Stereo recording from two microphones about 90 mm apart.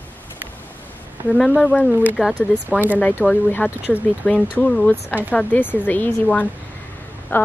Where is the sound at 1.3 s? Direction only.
5° left (ahead or behind).